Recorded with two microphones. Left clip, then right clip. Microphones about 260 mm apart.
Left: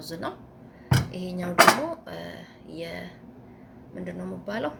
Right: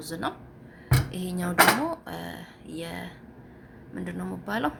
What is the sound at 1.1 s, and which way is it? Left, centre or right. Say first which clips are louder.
Beatboxing: right 1 dB; right.